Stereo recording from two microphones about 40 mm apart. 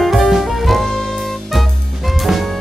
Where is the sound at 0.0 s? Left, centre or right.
Centre.